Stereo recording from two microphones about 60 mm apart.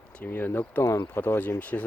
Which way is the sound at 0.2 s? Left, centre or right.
Left.